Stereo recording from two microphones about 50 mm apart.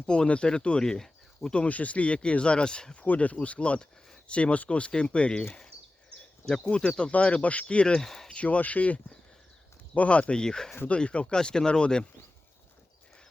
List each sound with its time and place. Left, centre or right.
0.0 s speech: left
1.5 s speech: left
6.5 s speech: centre
7.9 s speech: centre
8.4 s speech: left